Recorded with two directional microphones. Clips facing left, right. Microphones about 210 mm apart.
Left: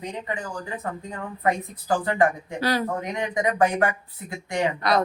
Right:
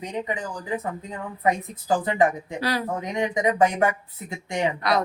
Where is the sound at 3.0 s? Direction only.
20° right (ahead or behind).